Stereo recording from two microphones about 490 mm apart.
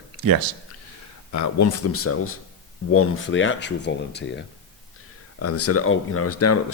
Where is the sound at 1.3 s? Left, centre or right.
Left.